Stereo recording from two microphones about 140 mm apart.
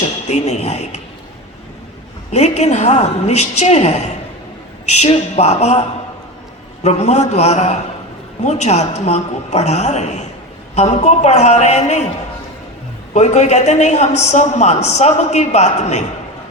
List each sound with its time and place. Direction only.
0.3 s a woman's voice: 50° left (ahead or behind)
2.3 s a woman's voice: 50° left (ahead or behind)
6.8 s a woman's voice: 50° left (ahead or behind)
13.1 s a woman's voice: 55° left (ahead or behind)